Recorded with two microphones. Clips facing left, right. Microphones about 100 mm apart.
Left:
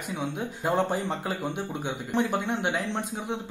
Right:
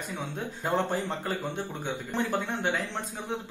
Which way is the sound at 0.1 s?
15° left (ahead or behind).